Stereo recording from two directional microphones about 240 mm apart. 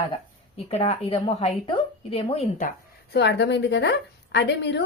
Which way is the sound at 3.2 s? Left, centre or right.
Left.